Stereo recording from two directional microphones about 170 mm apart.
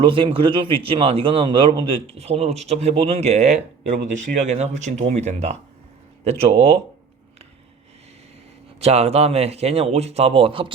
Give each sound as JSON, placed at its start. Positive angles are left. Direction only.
{"t": 0.0, "sound": "a man's voice", "side_deg": -30}
{"t": 8.8, "sound": "a man's voice", "side_deg": -35}